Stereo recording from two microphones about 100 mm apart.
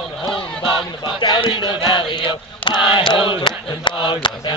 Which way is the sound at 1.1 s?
50° left (ahead or behind).